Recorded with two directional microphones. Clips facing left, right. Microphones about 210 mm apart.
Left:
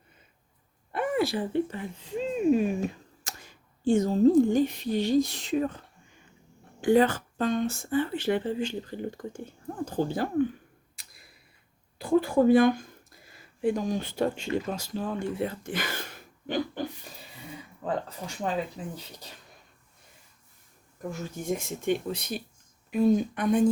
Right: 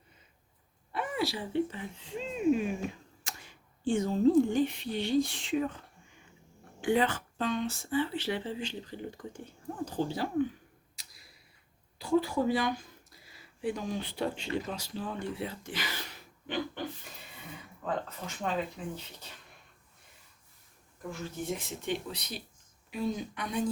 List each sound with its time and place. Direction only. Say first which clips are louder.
0.9 s speech: left 6 dB; 55° left (ahead or behind)
6.8 s speech: left 6 dB; 40° left (ahead or behind)
10.9 s clicking: left 2 dB; 55° left (ahead or behind)
11.9 s speech: left 5 dB; 55° left (ahead or behind)
21.1 s speech: left 4 dB; 45° left (ahead or behind)